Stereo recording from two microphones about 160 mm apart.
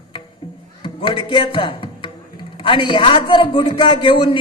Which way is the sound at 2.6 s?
30° left (ahead or behind).